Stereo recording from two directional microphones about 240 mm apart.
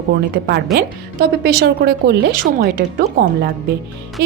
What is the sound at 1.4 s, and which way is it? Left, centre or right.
Speech, right.